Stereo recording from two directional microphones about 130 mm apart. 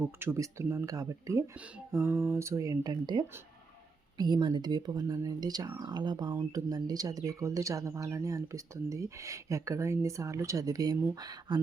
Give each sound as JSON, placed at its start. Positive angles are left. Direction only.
{"t": 0.0, "sound": "speech", "side_deg": -20}